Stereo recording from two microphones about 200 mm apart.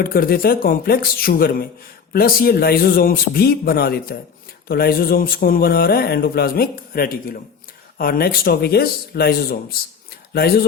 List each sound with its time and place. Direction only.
0.0 s speech: 50° left (ahead or behind)